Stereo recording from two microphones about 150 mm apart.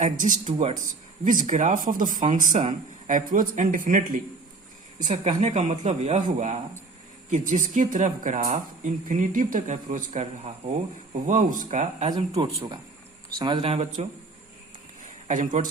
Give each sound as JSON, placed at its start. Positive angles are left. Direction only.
{"t": 0.0, "sound": "speech", "side_deg": -55}
{"t": 2.5, "sound": "speech", "side_deg": -45}
{"t": 3.1, "sound": "speech", "side_deg": -60}
{"t": 11.3, "sound": "speech", "side_deg": -60}
{"t": 12.4, "sound": "speech", "side_deg": -30}
{"t": 15.3, "sound": "speech", "side_deg": -60}